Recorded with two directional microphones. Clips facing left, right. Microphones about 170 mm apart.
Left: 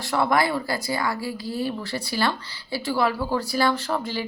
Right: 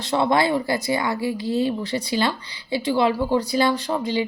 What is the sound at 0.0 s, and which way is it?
A woman's voice, 20° right (ahead or behind).